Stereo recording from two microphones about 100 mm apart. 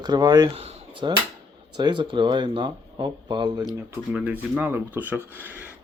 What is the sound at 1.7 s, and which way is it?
Speech, 50° right (ahead or behind).